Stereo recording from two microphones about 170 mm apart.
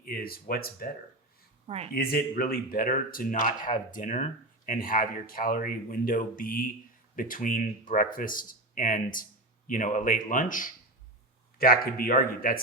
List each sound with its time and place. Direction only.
0.0 s speech: 60° left (ahead or behind)
1.6 s speech: 40° right (ahead or behind)
1.9 s speech: 60° left (ahead or behind)
11.5 s speech: 60° left (ahead or behind)